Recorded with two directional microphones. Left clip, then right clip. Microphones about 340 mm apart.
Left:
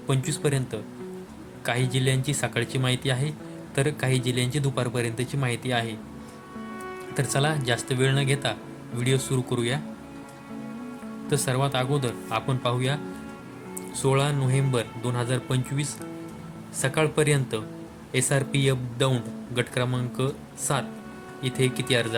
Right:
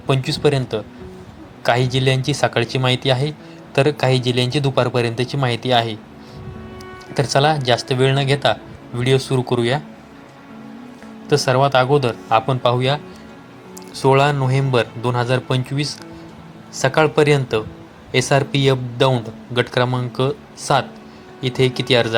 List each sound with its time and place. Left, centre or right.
0.1 s a man's voice: left
7.1 s a man's voice: left
11.3 s a man's voice: left
14.0 s a man's voice: left